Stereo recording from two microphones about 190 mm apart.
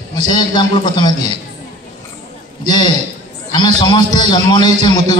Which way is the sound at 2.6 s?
20° left (ahead or behind).